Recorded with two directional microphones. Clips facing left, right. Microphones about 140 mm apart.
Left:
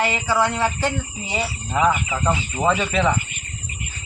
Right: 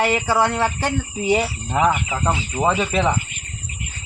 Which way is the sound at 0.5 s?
55° right (ahead or behind).